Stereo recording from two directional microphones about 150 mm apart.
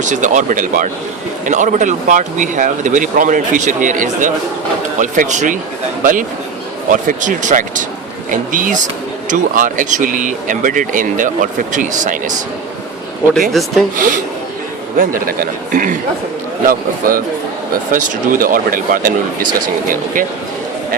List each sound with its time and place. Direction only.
0.0 s speech: 55° right (ahead or behind)
13.5 s speech: centre (ahead or behind)
14.9 s speech: 70° right (ahead or behind)